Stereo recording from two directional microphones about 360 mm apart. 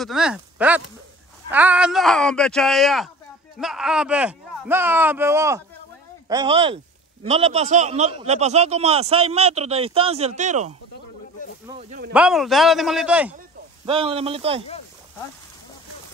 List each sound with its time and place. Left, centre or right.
0.0 s a man's voice: centre
12.1 s speech: centre
13.8 s a man's voice: centre